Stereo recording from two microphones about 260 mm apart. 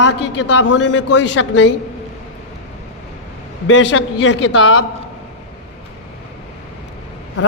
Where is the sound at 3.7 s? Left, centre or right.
Left.